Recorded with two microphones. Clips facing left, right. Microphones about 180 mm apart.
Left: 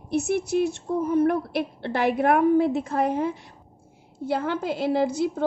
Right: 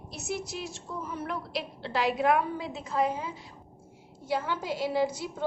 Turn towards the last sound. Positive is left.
turn(degrees=55)  # may be behind; listen again after turning